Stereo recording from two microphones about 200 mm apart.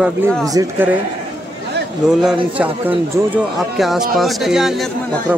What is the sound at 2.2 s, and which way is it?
Speech, 5° right (ahead or behind).